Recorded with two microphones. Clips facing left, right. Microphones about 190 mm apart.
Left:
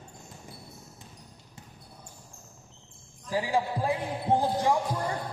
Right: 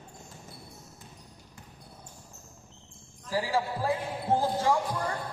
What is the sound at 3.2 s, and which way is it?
Speech, 20° left (ahead or behind).